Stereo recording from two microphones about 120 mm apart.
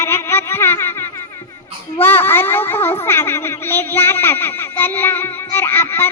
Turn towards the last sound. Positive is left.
turn(degrees=20)  # may be behind; listen again after turning